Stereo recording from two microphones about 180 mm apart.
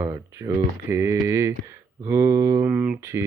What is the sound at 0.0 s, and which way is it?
Speech, 15° right (ahead or behind).